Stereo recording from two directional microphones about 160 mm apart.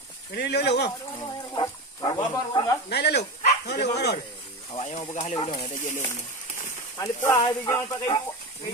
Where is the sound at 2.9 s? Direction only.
90° left.